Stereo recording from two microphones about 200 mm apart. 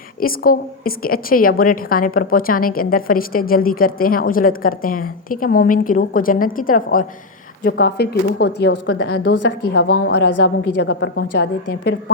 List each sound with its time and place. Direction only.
0.2 s a woman's voice: 45° left (ahead or behind)
7.6 s a woman's voice: 55° left (ahead or behind)
9.2 s a woman's voice: 75° left (ahead or behind)
10.8 s a woman's voice: 60° left (ahead or behind)